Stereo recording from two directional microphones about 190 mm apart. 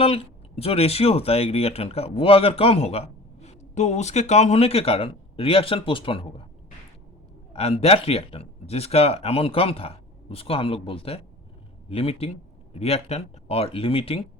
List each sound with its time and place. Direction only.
0.0 s speech: 30° left (ahead or behind)
7.5 s speech: 30° left (ahead or behind)